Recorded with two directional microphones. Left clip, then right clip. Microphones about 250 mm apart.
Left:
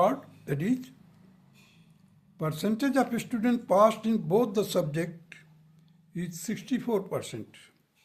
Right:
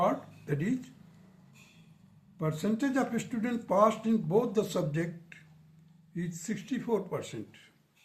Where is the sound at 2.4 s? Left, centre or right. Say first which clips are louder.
Left 2 dB; left.